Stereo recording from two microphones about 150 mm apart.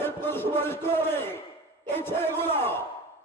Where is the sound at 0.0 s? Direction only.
15° left (ahead or behind).